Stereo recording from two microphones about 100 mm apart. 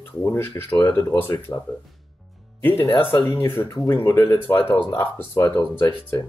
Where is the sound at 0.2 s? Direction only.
25° left (ahead or behind).